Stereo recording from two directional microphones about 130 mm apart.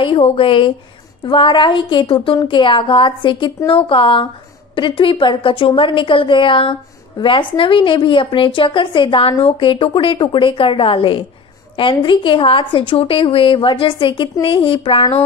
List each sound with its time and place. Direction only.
0.0 s a woman's voice: 45° left (ahead or behind)